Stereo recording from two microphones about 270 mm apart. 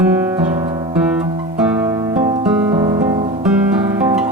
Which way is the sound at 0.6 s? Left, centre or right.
Centre.